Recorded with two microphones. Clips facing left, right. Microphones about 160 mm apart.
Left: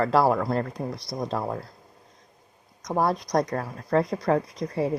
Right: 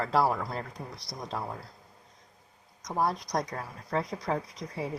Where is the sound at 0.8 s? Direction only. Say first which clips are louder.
Left 10 dB; 55° left (ahead or behind).